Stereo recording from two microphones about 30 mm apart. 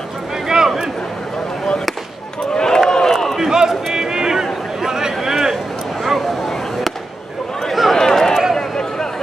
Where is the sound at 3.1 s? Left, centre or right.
Centre.